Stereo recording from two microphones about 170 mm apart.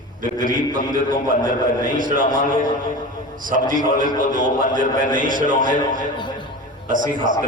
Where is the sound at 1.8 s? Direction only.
50° right (ahead or behind).